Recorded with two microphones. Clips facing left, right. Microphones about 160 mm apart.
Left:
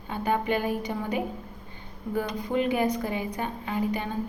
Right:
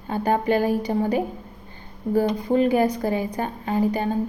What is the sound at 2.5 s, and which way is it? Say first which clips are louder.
A woman's voice: right 5 dB; 35° right (ahead or behind).